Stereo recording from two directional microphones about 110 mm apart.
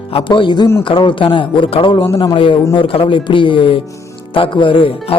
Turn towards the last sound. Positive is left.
turn(degrees=55)  # may be behind; listen again after turning